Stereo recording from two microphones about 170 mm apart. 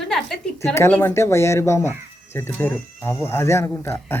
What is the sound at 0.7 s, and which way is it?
Speech, 15° left (ahead or behind).